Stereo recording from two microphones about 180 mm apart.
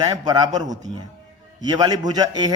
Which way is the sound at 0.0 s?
25° right (ahead or behind).